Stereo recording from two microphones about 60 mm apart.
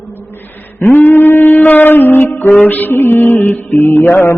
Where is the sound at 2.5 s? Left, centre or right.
Left.